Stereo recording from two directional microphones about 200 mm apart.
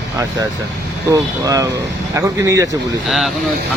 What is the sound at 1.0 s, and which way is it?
Speech, 15° right (ahead or behind).